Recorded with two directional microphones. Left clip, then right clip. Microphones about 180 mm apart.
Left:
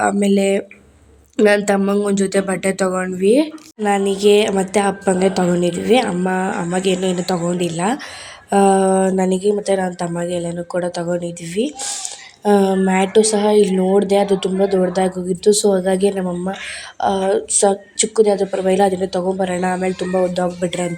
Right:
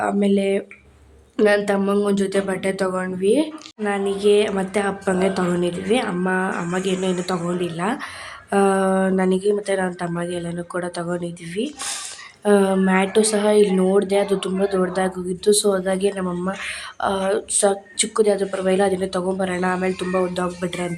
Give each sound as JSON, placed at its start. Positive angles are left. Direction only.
{"t": 0.1, "sound": "speech", "side_deg": 25}
{"t": 1.8, "sound": "speech", "side_deg": 15}